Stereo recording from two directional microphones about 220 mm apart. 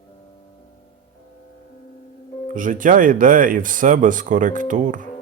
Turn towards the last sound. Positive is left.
turn(degrees=-35)  # may be behind; listen again after turning